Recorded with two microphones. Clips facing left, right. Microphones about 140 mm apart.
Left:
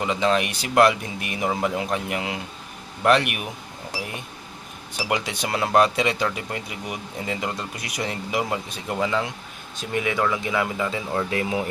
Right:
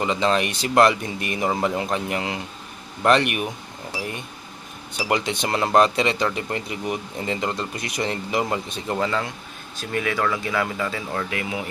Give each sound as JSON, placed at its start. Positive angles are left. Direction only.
{"t": 0.0, "sound": "speech", "side_deg": 5}
{"t": 5.0, "sound": "speech", "side_deg": 5}
{"t": 11.3, "sound": "speech", "side_deg": 30}